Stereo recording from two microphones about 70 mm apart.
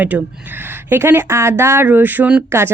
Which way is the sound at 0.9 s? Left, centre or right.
Right.